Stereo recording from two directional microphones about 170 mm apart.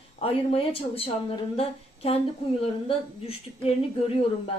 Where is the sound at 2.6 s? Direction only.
35° left (ahead or behind).